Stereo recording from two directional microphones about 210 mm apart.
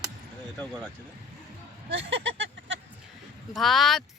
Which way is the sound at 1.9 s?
55° right (ahead or behind).